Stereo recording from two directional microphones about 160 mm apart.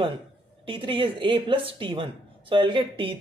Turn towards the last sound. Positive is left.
turn(degrees=-30)  # may be behind; listen again after turning